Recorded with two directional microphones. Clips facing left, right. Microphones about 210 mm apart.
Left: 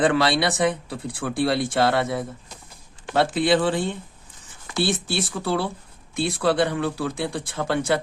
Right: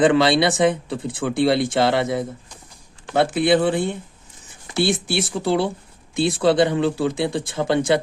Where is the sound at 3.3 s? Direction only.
10° right (ahead or behind).